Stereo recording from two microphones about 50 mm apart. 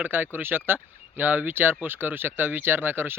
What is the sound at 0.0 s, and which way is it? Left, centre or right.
Speech, right.